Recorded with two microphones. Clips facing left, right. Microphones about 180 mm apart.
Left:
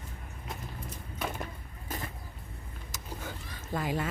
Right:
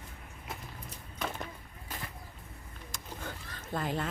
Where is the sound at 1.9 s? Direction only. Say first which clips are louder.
Left 5 dB; 45° left (ahead or behind).